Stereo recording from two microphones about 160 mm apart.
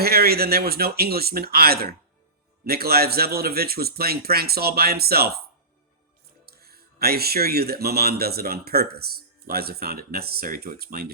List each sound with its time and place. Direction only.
0.0 s speech: 75° right (ahead or behind)
6.4 s speech: 75° right (ahead or behind)